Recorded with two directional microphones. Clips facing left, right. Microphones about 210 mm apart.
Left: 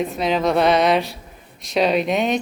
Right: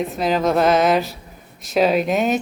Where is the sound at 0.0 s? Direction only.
Centre (ahead or behind).